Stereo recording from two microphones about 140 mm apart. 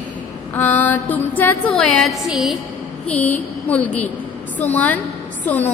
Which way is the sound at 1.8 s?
Centre (ahead or behind).